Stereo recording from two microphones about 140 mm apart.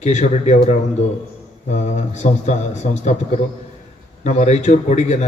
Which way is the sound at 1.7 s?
55° left (ahead or behind).